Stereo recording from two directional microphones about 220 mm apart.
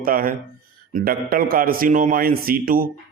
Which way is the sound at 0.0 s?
40° right (ahead or behind).